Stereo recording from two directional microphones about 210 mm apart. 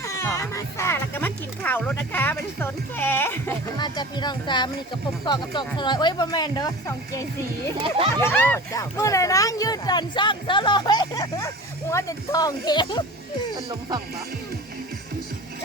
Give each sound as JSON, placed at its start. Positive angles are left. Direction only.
{"t": 0.0, "sound": "speech", "side_deg": 15}
{"t": 3.8, "sound": "speech", "side_deg": 20}
{"t": 7.9, "sound": "speech", "side_deg": -25}
{"t": 8.2, "sound": "speech", "side_deg": 10}
{"t": 13.6, "sound": "speech", "side_deg": -20}